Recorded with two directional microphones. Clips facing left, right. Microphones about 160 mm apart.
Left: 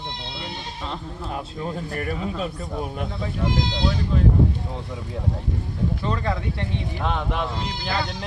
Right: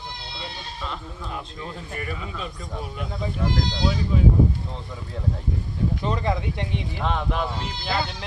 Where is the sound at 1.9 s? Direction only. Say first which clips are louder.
Left 5 dB; 40° left (ahead or behind).